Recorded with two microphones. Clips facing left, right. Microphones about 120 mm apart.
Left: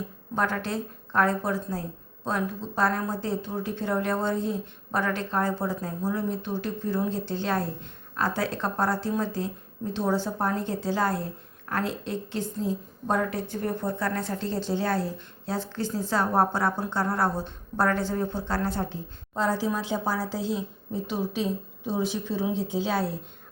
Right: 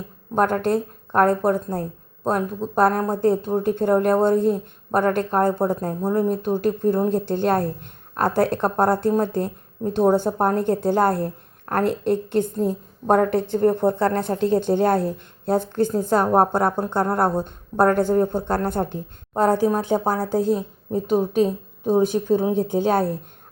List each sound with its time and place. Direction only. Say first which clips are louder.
0.3 s a woman's voice: right 8 dB; 50° right (ahead or behind)